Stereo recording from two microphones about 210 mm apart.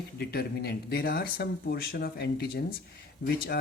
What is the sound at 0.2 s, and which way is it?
Speech, 50° left (ahead or behind).